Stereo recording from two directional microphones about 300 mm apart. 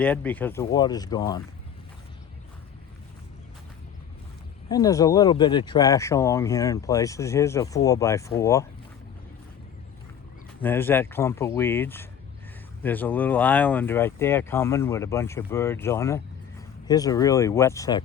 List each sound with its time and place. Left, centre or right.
0.0 s speech: centre
4.7 s speech: centre
10.6 s speech: centre